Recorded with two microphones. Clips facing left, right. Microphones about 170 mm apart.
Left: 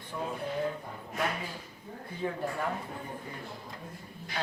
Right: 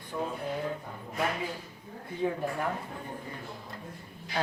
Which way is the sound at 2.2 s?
15° right (ahead or behind).